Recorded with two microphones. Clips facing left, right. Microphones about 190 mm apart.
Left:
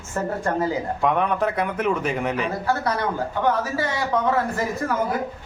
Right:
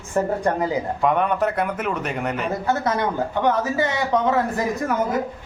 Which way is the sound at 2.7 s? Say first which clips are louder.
Right 2 dB; 20° right (ahead or behind).